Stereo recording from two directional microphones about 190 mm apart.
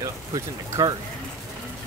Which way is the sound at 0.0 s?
20° right (ahead or behind).